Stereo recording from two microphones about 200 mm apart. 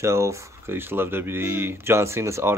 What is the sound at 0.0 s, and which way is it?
Speech, 15° right (ahead or behind).